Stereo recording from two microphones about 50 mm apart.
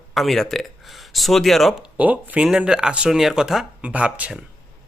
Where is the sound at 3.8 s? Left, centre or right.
Right.